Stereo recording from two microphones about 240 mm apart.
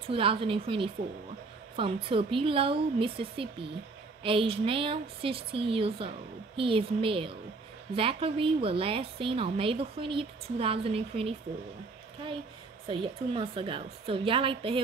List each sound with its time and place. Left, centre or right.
0.1 s a woman's voice: right
12.8 s a woman's voice: right